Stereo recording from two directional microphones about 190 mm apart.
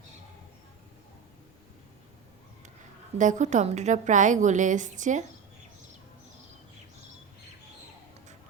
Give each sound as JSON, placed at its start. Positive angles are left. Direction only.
{"t": 3.2, "sound": "a woman's voice", "side_deg": -40}